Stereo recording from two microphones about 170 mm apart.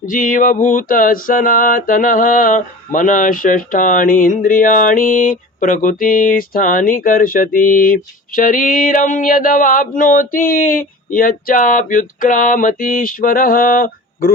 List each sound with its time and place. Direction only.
0.0 s mantra: 50° left (ahead or behind)